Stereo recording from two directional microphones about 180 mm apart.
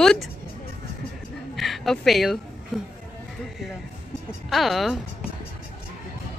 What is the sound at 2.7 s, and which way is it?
Speech, centre (ahead or behind).